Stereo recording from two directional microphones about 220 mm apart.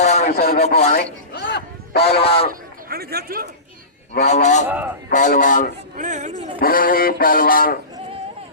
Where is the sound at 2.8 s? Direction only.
45° right (ahead or behind).